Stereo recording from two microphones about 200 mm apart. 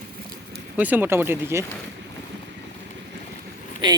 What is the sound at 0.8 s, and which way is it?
Speech, 10° right (ahead or behind).